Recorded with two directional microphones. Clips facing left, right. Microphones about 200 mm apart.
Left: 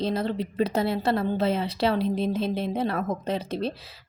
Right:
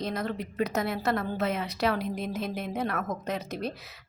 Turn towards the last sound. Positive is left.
turn(degrees=30)  # may be behind; listen again after turning